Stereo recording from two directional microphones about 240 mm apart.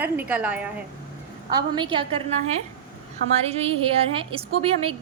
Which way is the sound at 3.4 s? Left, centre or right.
Right.